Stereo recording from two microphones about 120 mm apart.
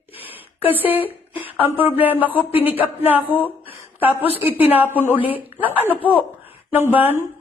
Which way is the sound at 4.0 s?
15° right (ahead or behind).